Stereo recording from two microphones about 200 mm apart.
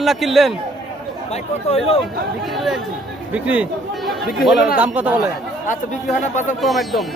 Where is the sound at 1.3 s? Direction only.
30° left (ahead or behind).